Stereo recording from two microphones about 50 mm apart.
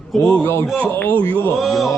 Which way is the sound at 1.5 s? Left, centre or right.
Centre.